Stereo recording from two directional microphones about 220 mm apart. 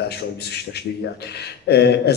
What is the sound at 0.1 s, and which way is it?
A man's voice, 50° left (ahead or behind).